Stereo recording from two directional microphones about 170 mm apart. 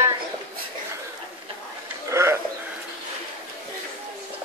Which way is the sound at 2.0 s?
15° right (ahead or behind).